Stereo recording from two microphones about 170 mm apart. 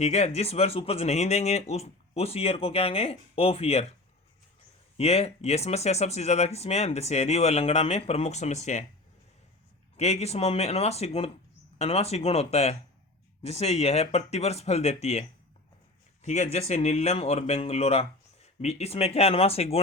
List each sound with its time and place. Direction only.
0.0 s speech: 40° left (ahead or behind)
4.9 s speech: 35° left (ahead or behind)
10.0 s speech: 40° left (ahead or behind)
16.2 s speech: 40° left (ahead or behind)